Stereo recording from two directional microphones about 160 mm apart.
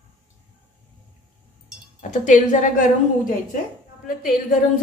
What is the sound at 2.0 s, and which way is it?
A woman's voice, 50° left (ahead or behind).